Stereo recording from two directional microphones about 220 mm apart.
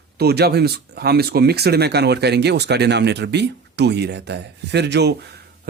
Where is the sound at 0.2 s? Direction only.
45° right (ahead or behind).